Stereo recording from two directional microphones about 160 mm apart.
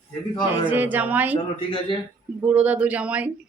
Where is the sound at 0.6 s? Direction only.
10° right (ahead or behind).